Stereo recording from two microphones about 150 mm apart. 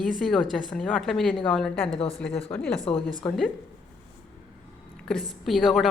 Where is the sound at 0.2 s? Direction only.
Centre (ahead or behind).